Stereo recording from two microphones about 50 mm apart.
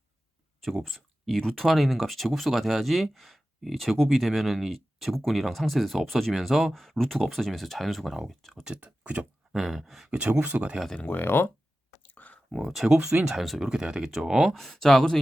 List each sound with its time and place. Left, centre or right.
0.6 s speech: centre
8.6 s speech: right
9.5 s speech: centre
10.1 s speech: right
11.0 s speech: left
12.0 s a sound: left
12.5 s speech: centre
13.1 s speech: centre
13.4 s speech: centre
13.7 s speech: centre
14.5 s speech: centre